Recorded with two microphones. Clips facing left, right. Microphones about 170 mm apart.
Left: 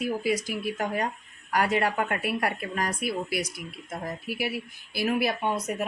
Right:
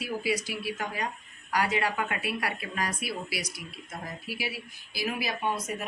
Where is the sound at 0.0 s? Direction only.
50° left (ahead or behind).